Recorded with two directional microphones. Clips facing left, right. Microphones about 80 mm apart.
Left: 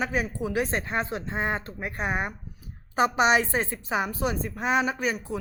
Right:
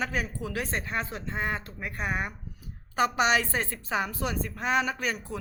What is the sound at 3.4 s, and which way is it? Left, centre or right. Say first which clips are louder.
A woman's voice: left 3 dB; left.